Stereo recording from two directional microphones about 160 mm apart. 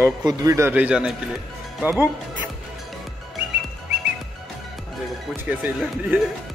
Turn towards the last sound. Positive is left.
turn(degrees=-10)  # may be behind; listen again after turning